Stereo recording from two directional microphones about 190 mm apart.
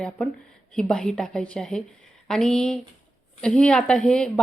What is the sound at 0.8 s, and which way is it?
Speech, 5° left (ahead or behind).